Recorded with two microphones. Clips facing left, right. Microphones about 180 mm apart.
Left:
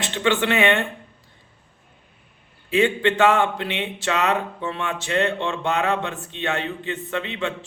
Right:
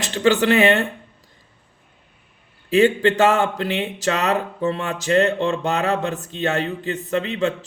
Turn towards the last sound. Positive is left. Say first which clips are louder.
# right 5 dB
turn(degrees=-40)  # may be behind; listen again after turning